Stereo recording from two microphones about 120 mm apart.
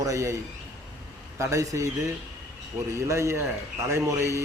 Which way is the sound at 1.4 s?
25° right (ahead or behind).